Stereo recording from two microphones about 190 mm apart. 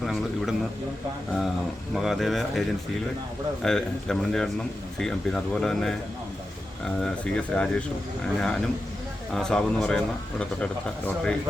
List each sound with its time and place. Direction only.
0.0 s a man's voice: centre (ahead or behind)
2.0 s a man's voice: centre (ahead or behind)